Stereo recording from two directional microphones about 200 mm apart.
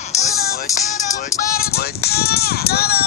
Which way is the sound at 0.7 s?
15° left (ahead or behind).